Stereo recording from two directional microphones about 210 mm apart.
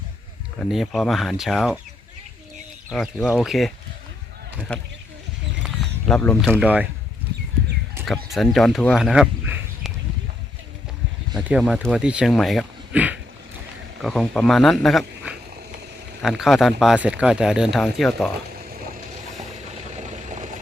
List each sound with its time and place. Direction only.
0.6 s speech: centre (ahead or behind)
2.9 s speech: centre (ahead or behind)
4.7 s speech: 5° left (ahead or behind)
5.6 s a sound: centre (ahead or behind)
6.5 s speech: 5° right (ahead or behind)
8.0 s speech: centre (ahead or behind)
11.3 s speech: 5° right (ahead or behind)
19.4 s vehicle: 30° right (ahead or behind)